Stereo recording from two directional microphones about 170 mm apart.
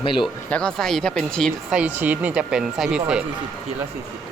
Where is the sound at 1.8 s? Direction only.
10° right (ahead or behind).